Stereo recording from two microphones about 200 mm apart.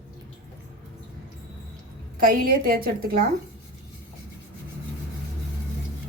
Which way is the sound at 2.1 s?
45° right (ahead or behind).